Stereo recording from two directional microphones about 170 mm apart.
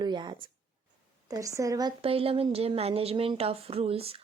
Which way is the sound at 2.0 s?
35° right (ahead or behind).